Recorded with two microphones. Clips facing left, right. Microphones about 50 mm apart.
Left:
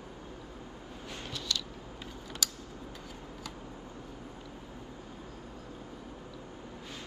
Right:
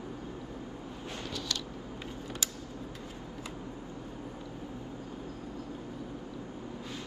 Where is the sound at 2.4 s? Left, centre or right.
Right.